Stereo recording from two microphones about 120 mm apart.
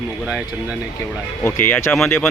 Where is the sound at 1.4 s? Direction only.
20° left (ahead or behind).